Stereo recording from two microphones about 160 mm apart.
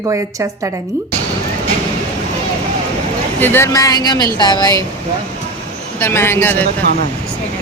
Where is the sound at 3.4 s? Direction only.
15° left (ahead or behind).